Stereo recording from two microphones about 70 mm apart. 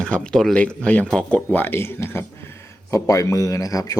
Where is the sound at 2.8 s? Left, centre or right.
Left.